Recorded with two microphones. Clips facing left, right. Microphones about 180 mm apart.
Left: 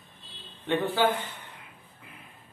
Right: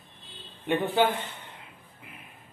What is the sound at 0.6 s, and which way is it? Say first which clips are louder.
Speech: right 1 dB; 20° right (ahead or behind).